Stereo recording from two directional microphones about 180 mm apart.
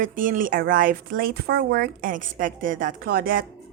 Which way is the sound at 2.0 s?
50° right (ahead or behind).